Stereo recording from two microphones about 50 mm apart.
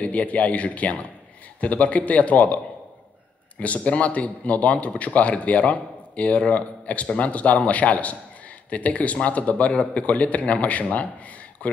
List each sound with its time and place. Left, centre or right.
0.0 s a man's voice: left